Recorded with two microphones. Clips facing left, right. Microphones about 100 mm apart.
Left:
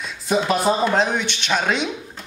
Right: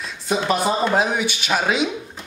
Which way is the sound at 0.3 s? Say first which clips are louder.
Left 1 dB; centre (ahead or behind).